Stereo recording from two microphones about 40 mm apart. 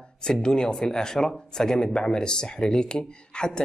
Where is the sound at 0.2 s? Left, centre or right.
Centre.